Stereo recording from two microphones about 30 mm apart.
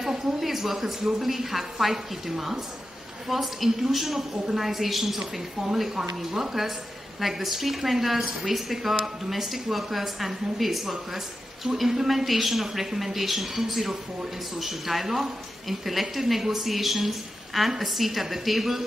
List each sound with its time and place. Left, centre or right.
0.4 s a woman's voice: centre